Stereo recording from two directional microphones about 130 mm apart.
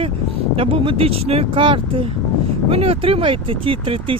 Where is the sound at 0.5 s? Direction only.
45° right (ahead or behind).